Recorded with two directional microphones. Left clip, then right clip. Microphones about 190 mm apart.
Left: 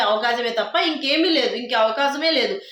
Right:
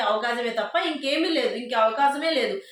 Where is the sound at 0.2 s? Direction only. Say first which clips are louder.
Left 4 dB; 20° left (ahead or behind).